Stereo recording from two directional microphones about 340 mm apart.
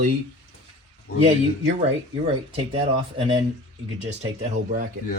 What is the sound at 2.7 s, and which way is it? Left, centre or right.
Speech, centre.